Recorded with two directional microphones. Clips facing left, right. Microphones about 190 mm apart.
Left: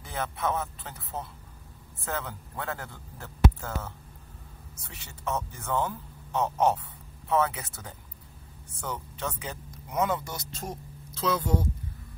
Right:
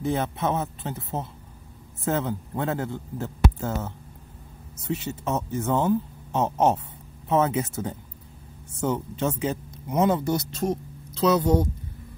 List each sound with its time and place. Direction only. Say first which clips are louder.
0.0 s speech: right 6 dB; 25° right (ahead or behind)
10.5 s speech: right 11 dB; 70° right (ahead or behind)